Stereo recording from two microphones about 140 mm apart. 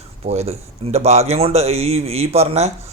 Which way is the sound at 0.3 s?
50° right (ahead or behind).